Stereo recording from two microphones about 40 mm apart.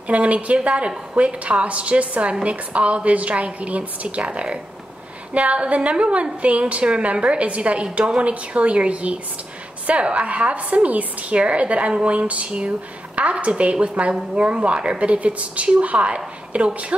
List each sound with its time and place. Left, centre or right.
0.1 s a woman's voice: right